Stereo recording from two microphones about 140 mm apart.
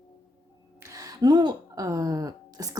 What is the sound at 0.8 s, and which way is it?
Speech, 25° right (ahead or behind).